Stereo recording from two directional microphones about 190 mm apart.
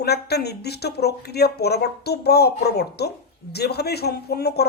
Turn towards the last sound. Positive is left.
turn(degrees=55)  # may be behind; listen again after turning